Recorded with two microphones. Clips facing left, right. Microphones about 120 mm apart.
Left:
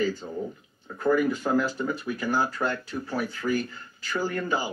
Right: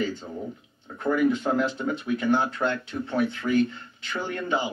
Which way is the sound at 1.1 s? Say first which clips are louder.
Right 2 dB; 20° right (ahead or behind).